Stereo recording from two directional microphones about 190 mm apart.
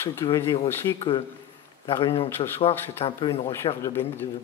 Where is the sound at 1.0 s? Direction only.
30° left (ahead or behind); by 4.2 s 10° left (ahead or behind).